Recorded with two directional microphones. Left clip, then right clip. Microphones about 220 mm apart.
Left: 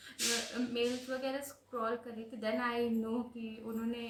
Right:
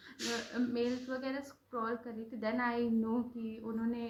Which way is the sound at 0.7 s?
35° left (ahead or behind).